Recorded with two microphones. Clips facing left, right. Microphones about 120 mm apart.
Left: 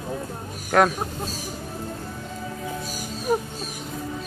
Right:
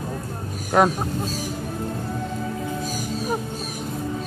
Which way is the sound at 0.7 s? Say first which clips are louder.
Right 1 dB; 15° right (ahead or behind).